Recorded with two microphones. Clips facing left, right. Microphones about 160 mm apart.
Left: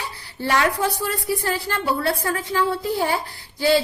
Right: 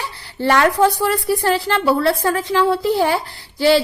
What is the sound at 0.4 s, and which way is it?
A woman's voice, 65° right (ahead or behind).